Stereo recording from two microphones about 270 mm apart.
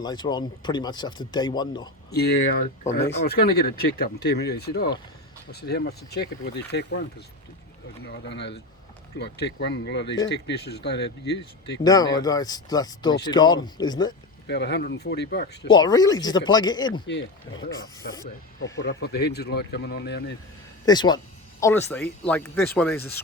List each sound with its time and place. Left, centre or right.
0.0 s speech: centre
2.0 s speech: left
8.0 s speech: left
11.8 s speech: centre
14.4 s speech: left
15.7 s speech: centre
17.1 s speech: left
17.7 s speech: centre
18.6 s speech: left
20.8 s speech: centre